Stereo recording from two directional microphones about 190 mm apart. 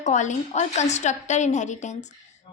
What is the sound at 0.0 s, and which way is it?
A woman's voice, 40° left (ahead or behind).